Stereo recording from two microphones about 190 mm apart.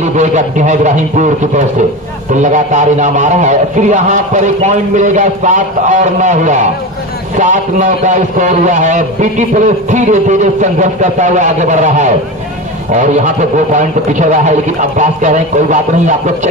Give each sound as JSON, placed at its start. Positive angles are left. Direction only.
{"t": 0.0, "sound": "a man's voice", "side_deg": -40}